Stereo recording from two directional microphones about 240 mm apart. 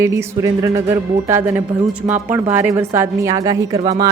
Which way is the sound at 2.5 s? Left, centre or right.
Centre.